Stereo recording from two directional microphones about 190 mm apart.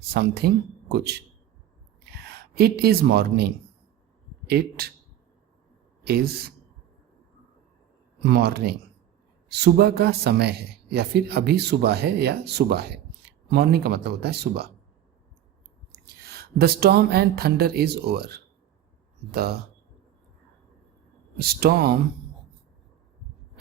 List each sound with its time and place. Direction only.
0.1 s speech: 55° right (ahead or behind)
6.1 s speech: 55° right (ahead or behind)
8.2 s speech: 60° right (ahead or behind)
15.9 s speech: 55° right (ahead or behind)
21.3 s speech: 55° right (ahead or behind)